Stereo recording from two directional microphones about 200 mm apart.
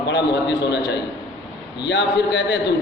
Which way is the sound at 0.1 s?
60° left (ahead or behind).